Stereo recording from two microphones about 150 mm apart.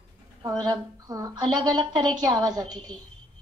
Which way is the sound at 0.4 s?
25° right (ahead or behind).